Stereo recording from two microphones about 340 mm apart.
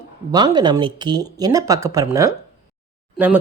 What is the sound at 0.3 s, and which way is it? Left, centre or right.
Speech, centre.